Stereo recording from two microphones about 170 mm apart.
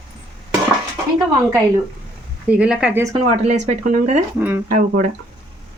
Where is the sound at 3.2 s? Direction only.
40° right (ahead or behind).